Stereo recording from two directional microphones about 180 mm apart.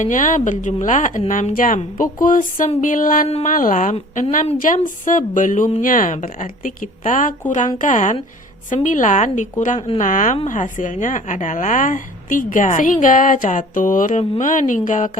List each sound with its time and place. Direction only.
0.0 s a woman's voice: 45° left (ahead or behind)